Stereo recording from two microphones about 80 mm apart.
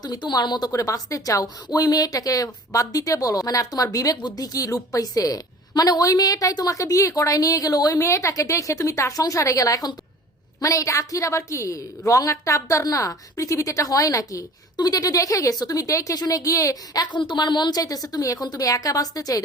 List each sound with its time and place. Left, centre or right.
0.0 s speech: left
0.7 s a woman's voice: left
17.1 s a woman's voice: left